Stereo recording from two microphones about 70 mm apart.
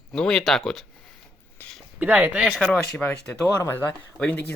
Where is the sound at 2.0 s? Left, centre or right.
Right.